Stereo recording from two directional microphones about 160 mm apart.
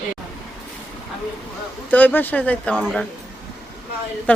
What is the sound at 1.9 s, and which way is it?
Speech, 10° left (ahead or behind).